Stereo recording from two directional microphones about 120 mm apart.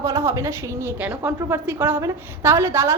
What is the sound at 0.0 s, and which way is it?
A woman's voice, 25° right (ahead or behind).